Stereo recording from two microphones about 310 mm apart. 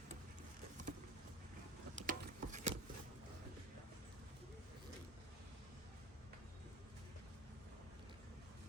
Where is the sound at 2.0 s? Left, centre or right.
Right.